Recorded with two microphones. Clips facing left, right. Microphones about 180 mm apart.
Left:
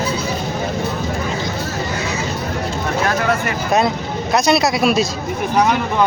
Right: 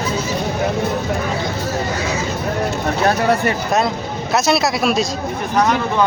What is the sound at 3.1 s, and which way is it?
Speech, 30° right (ahead or behind).